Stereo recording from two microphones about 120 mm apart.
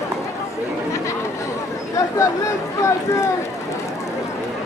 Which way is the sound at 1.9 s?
25° left (ahead or behind).